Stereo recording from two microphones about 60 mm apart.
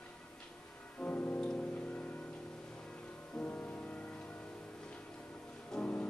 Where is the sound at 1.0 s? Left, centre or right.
Left.